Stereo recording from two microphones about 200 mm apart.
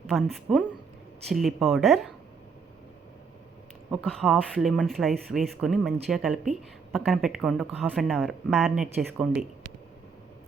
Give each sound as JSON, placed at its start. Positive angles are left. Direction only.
{"t": 0.1, "sound": "speech", "side_deg": 0}
{"t": 3.9, "sound": "speech", "side_deg": 5}